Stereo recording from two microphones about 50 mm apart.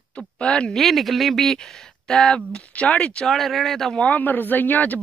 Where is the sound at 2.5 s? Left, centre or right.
Left.